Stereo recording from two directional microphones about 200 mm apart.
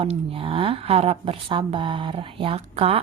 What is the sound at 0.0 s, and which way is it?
A woman's voice, 30° right (ahead or behind).